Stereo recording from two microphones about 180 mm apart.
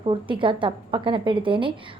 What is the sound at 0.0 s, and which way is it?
A woman's voice, 30° right (ahead or behind).